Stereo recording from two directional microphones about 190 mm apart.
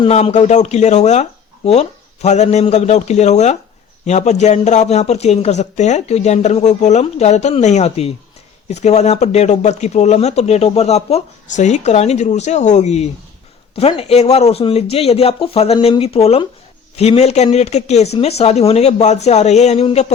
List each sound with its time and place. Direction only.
0.0 s speech: 35° left (ahead or behind)